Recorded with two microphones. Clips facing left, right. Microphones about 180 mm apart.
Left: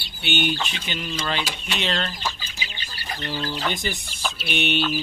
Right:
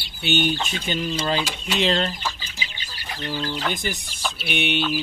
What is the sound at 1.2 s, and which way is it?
Speech, 30° right (ahead or behind).